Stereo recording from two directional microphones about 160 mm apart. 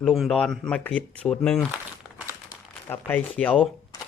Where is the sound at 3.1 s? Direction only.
10° left (ahead or behind).